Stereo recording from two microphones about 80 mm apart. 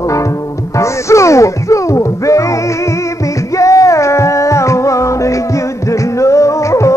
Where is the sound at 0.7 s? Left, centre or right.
Left.